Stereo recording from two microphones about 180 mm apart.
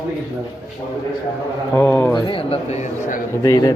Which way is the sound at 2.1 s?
25° left (ahead or behind).